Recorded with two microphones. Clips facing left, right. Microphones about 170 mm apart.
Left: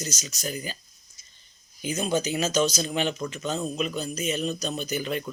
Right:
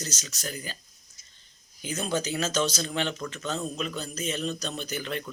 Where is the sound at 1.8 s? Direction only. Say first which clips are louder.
Left 3 dB; 15° left (ahead or behind).